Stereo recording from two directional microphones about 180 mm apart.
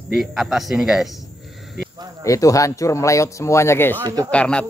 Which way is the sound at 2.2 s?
20° left (ahead or behind).